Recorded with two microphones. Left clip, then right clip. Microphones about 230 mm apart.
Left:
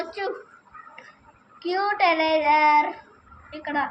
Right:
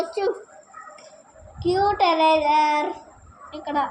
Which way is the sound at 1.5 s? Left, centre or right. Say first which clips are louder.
Right 3 dB; left.